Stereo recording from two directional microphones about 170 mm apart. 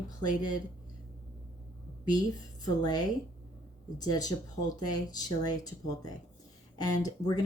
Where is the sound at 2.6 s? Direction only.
25° left (ahead or behind).